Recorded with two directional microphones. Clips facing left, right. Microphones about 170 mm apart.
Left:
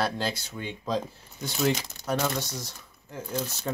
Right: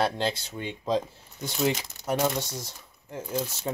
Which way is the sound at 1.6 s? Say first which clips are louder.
Even; 10° right (ahead or behind).